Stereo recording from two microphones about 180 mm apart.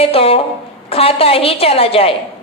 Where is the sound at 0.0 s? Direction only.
30° left (ahead or behind).